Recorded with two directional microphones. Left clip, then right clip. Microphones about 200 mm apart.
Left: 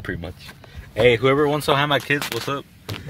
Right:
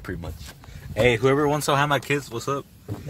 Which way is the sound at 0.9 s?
15° left (ahead or behind).